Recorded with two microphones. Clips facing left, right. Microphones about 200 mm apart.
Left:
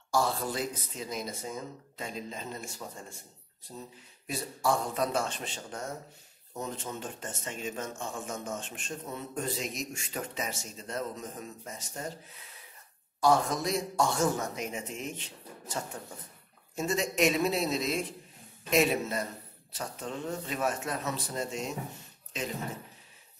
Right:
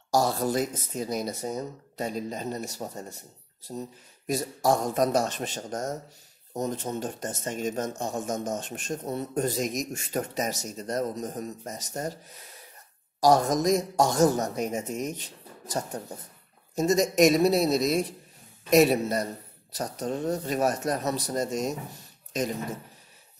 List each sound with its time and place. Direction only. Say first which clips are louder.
0.1 s speech: right 5 dB; 40° right (ahead or behind)